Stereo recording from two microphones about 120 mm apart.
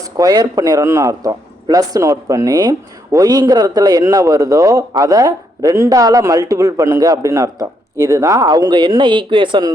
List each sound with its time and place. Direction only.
0.2 s a man's voice: 30° right (ahead or behind)